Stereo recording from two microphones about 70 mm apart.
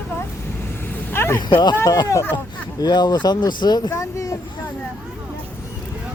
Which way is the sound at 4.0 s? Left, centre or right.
Left.